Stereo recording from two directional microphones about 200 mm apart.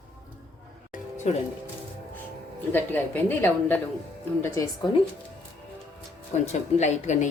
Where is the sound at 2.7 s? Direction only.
10° left (ahead or behind).